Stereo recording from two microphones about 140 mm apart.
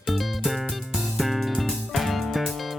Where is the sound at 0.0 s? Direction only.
Centre (ahead or behind).